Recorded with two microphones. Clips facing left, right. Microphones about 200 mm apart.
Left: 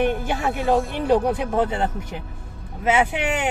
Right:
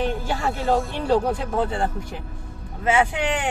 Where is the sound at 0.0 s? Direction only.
20° left (ahead or behind).